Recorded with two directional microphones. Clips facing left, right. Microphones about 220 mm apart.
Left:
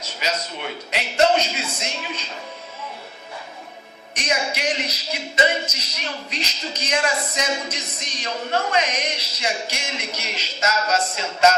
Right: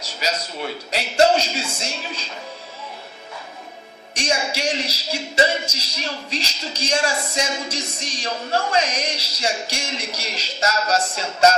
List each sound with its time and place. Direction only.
0.2 s speech: 35° right (ahead or behind)
4.1 s speech: 30° right (ahead or behind)